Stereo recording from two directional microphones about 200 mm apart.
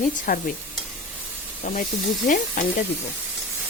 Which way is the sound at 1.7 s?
40° left (ahead or behind).